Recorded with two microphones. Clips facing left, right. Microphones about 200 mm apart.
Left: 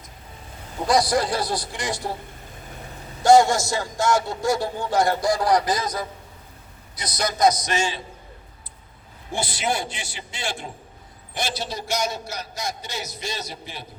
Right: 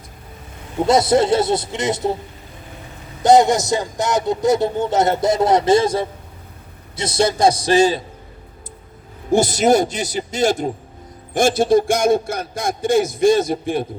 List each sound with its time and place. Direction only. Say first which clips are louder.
0.9 s a man's voice: right 6 dB; 25° right (ahead or behind)
3.2 s a man's voice: right 3 dB; 20° right (ahead or behind); by 8.0 s 35° right (ahead or behind)
9.3 s a man's voice: right 12 dB; 45° right (ahead or behind)